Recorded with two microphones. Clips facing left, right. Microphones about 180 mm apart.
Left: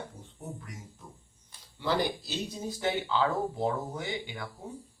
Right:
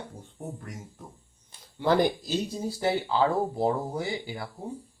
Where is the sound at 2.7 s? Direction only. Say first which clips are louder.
Right 3 dB; 35° right (ahead or behind).